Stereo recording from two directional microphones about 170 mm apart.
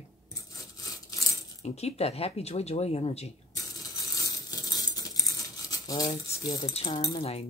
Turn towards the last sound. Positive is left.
turn(degrees=25)  # may be behind; listen again after turning